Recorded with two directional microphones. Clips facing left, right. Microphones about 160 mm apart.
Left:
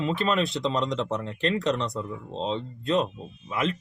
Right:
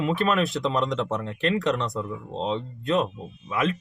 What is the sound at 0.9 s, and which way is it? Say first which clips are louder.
Speech: right 1 dB; 30° left (ahead or behind).